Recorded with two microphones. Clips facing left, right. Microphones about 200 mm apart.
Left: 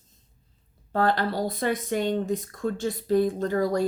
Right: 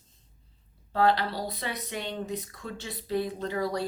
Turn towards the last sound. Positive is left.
turn(degrees=45)  # may be behind; listen again after turning